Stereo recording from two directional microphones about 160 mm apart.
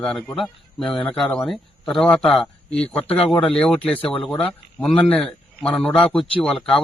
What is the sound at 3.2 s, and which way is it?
Speech, 35° left (ahead or behind).